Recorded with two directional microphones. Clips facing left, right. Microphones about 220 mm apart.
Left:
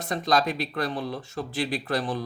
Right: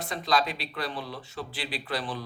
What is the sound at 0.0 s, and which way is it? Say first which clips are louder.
Speech: left 3 dB; 45° left (ahead or behind).